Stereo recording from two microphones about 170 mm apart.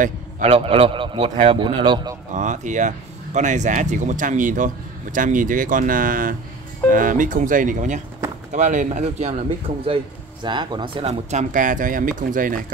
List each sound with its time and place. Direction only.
0.0 s a man's voice: 40° right (ahead or behind)
2.3 s speech: 45° right (ahead or behind)
10.4 s speech: 25° right (ahead or behind); by 12.7 s 50° right (ahead or behind)